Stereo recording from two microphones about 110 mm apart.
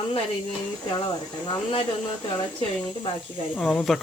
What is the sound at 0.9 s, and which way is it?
Speech, 40° left (ahead or behind).